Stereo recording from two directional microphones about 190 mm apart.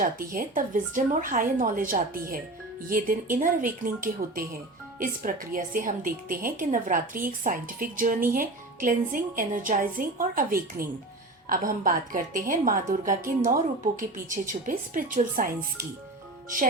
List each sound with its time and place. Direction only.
0.0 s a woman's voice: 45° right (ahead or behind)